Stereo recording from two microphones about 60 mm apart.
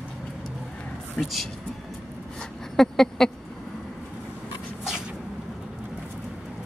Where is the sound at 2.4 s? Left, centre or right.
Centre.